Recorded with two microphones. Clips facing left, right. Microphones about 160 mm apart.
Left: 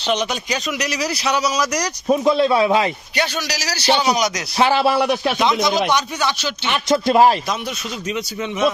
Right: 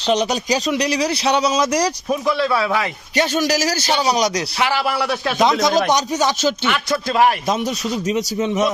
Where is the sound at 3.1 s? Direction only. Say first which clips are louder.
Right 9 dB; 45° right (ahead or behind).